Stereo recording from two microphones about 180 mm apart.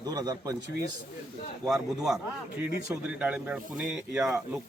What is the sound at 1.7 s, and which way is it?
A man's voice, centre (ahead or behind).